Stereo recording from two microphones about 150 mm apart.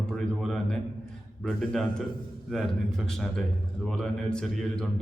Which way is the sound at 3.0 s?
5° left (ahead or behind).